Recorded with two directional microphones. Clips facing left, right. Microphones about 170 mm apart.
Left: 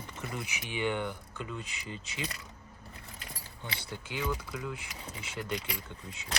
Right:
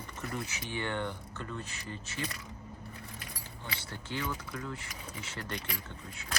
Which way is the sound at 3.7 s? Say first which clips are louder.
Even; 15° left (ahead or behind).